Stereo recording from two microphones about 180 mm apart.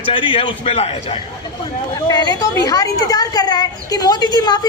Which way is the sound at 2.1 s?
20° left (ahead or behind).